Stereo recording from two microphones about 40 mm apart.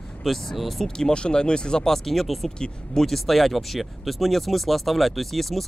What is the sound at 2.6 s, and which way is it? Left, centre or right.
Speech, centre.